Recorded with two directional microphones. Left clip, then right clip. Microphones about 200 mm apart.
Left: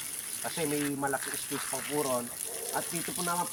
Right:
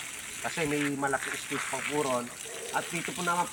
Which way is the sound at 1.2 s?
30° left (ahead or behind).